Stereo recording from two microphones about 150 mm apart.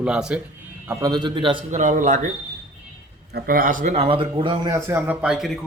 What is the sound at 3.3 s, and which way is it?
Speech, 75° right (ahead or behind).